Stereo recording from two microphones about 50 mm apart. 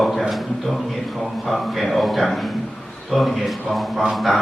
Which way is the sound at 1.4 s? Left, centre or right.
Centre.